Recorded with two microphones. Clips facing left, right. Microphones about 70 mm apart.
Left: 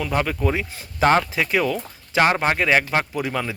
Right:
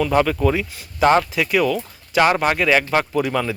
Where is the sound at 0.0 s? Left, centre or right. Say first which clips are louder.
Right 6 dB; centre.